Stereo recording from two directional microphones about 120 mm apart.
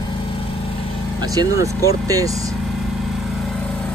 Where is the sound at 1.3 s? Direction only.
30° right (ahead or behind).